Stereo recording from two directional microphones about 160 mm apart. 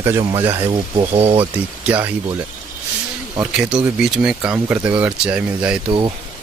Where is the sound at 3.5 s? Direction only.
5° right (ahead or behind).